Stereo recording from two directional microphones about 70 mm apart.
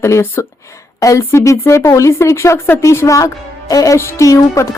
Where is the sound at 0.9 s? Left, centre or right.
Left.